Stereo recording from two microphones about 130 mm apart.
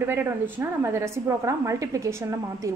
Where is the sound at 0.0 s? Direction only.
15° right (ahead or behind).